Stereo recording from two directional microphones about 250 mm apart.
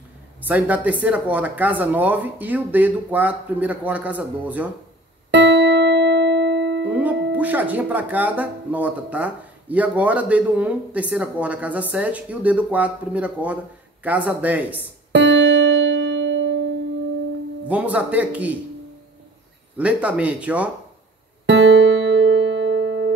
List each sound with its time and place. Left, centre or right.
0.4 s speech: centre
5.3 s music: right
6.9 s music: centre
7.3 s speech: centre
15.1 s music: right
17.6 s speech: centre
19.8 s speech: centre
21.5 s music: right